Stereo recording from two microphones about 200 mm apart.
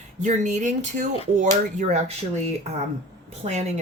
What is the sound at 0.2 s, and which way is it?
Speech, 35° right (ahead or behind).